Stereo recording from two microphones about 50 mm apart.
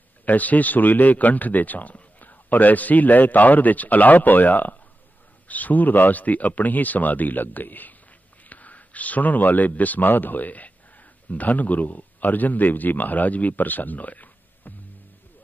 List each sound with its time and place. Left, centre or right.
0.2 s speech: left